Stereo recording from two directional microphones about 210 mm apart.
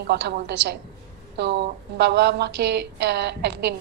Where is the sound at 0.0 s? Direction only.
50° right (ahead or behind).